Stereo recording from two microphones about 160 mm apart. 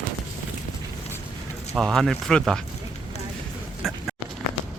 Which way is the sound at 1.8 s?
Centre (ahead or behind).